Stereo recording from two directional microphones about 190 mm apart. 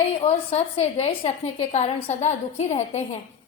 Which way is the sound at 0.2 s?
30° left (ahead or behind).